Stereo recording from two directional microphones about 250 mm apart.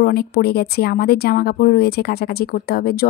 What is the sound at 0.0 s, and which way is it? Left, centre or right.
Speech, left.